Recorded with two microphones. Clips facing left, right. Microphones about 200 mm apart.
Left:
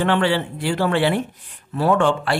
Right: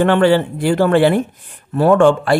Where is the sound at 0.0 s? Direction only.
50° right (ahead or behind).